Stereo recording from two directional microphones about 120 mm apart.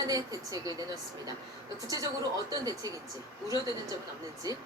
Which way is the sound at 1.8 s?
30° right (ahead or behind).